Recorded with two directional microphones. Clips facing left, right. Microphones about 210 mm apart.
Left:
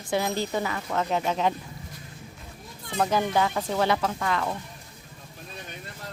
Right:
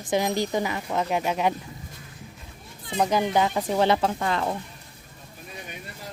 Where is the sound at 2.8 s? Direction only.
15° right (ahead or behind); by 4.5 s 30° right (ahead or behind).